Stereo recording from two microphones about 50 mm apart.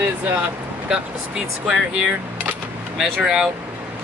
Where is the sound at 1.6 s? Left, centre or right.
Centre.